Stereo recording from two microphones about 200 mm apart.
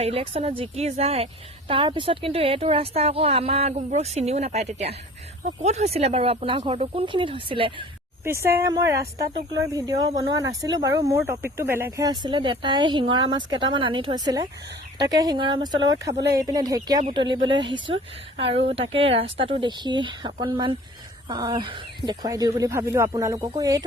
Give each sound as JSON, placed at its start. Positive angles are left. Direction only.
{"t": 0.0, "sound": "a woman's voice", "side_deg": -30}
{"t": 8.2, "sound": "a woman's voice", "side_deg": -15}